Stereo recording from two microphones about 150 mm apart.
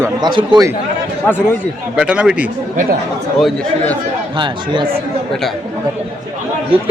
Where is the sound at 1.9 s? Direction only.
10° right (ahead or behind).